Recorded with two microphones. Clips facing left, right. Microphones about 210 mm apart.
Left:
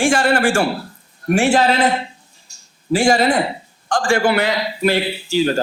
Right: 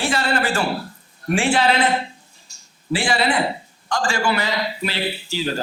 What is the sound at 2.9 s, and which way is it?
A man's voice, 45° left (ahead or behind).